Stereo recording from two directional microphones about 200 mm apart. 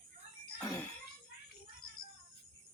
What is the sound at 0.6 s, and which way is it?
Music, 10° left (ahead or behind).